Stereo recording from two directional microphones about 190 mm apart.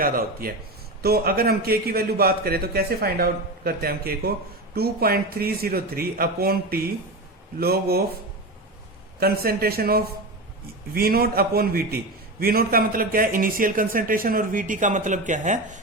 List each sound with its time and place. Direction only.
0.0 s a man's voice: 50° right (ahead or behind)
9.2 s a man's voice: 50° right (ahead or behind)